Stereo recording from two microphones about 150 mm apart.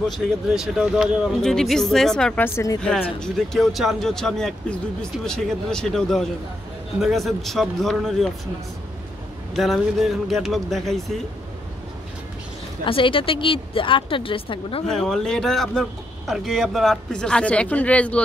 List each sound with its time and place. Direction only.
0.5 s speech: centre (ahead or behind); by 2.8 s 20° left (ahead or behind)
2.8 s speech: 5° left (ahead or behind)
9.5 s speech: centre (ahead or behind)
12.8 s a woman's voice: 35° left (ahead or behind)
14.9 s speech: 5° left (ahead or behind)